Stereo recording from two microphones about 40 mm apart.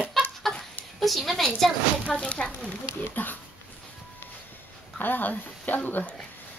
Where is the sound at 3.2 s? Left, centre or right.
Left.